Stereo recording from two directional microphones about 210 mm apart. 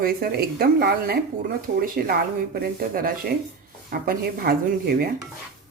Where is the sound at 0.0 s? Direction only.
45° right (ahead or behind).